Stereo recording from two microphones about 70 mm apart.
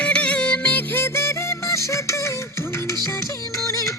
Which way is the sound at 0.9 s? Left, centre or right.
Left.